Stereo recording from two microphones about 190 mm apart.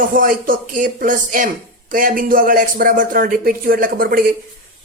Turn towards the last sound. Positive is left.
turn(degrees=-50)  # may be behind; listen again after turning